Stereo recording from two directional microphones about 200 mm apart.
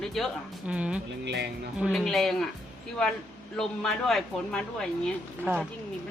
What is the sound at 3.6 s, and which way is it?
Speech, centre (ahead or behind).